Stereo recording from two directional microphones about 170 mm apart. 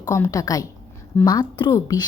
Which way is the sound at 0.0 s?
20° left (ahead or behind).